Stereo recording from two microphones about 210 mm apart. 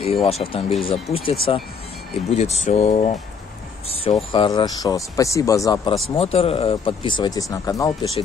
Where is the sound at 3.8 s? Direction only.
25° left (ahead or behind).